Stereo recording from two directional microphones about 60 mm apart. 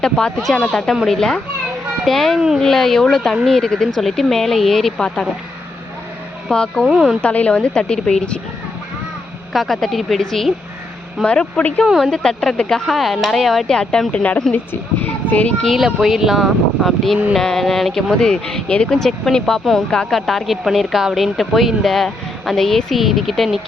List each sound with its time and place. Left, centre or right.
0.0 s speech: centre
6.5 s speech: centre
6.8 s speech: centre
7.2 s speech: left
9.5 s speech: centre
11.3 s speech: centre
13.7 s speech: centre; by 15.5 s left
15.7 s speech: centre